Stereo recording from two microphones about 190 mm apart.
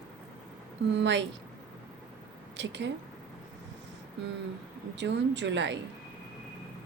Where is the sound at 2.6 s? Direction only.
70° right (ahead or behind).